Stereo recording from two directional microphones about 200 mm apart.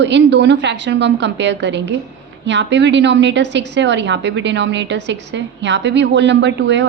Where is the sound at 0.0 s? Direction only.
60° right (ahead or behind).